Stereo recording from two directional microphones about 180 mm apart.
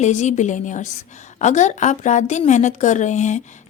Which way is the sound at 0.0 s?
40° left (ahead or behind).